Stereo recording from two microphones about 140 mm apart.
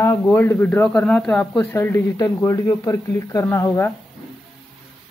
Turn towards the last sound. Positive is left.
turn(degrees=15)  # may be behind; listen again after turning